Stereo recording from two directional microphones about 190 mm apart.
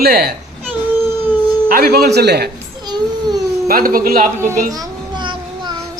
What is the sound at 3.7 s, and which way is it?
Speech, 50° right (ahead or behind).